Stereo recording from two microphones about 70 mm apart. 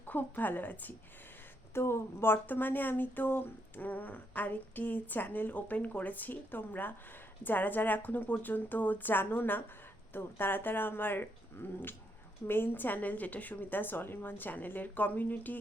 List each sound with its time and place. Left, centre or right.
0.0 s speech: left
1.7 s speech: left